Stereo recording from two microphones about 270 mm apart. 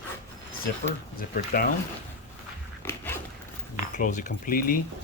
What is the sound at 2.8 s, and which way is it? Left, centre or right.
Dog, centre.